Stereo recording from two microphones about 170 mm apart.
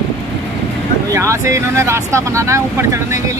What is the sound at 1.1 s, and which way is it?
Speech, 15° right (ahead or behind).